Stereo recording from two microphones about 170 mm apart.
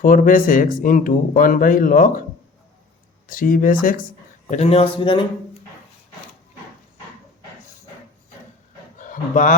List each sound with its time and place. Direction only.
0.0 s speech: 55° left (ahead or behind)
3.2 s speech: 55° left (ahead or behind)
4.4 s speech: 40° left (ahead or behind)
9.0 s dog: 50° left (ahead or behind)